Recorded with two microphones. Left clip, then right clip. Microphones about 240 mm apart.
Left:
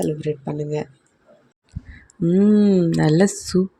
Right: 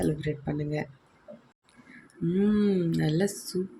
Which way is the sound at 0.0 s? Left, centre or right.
Centre.